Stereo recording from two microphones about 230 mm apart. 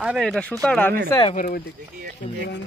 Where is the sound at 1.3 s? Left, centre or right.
Left.